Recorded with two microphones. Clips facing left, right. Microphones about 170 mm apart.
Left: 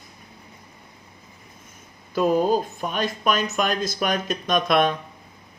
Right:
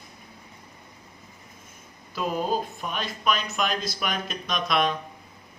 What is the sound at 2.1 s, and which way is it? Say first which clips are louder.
Speech: left 7 dB; 45° left (ahead or behind).